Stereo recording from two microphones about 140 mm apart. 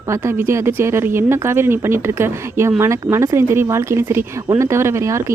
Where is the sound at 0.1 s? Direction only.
20° right (ahead or behind).